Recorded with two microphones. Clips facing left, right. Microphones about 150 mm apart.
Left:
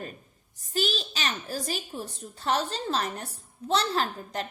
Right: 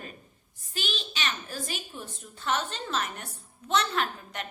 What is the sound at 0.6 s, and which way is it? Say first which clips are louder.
A child's voice: left 7 dB; 40° left (ahead or behind).